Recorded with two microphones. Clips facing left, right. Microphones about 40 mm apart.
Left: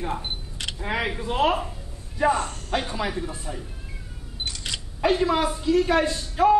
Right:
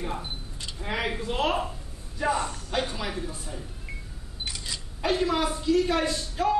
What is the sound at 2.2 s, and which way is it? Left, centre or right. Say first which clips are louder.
Speech: left 5 dB; left.